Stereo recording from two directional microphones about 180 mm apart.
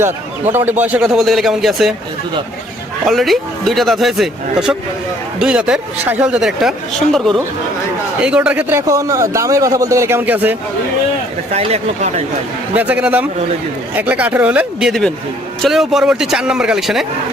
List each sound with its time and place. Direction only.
0.5 s speech: 10° right (ahead or behind)
3.1 s a man's voice: centre (ahead or behind)
11.5 s speech: 35° right (ahead or behind)
12.7 s a man's voice: 10° right (ahead or behind)